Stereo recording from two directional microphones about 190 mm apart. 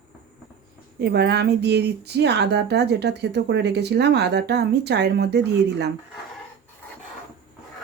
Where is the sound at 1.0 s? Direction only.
60° right (ahead or behind).